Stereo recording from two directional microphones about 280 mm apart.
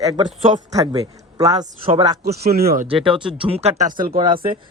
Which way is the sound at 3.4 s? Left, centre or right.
Right.